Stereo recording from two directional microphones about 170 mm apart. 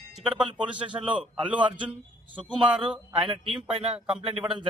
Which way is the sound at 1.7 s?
30° right (ahead or behind).